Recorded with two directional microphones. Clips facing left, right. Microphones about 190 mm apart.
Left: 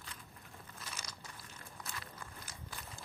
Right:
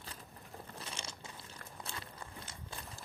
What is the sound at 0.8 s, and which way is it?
Crunch, 30° right (ahead or behind).